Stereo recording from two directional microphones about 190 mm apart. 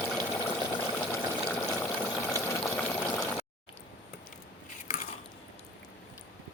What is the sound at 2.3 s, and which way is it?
Water, 15° left (ahead or behind).